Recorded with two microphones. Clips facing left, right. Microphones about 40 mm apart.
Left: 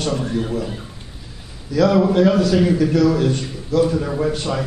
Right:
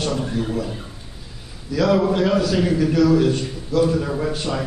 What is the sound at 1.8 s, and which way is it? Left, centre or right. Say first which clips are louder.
A man's voice: left 3 dB; centre.